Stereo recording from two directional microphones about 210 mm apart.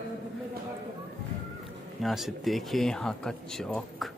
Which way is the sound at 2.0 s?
Centre (ahead or behind).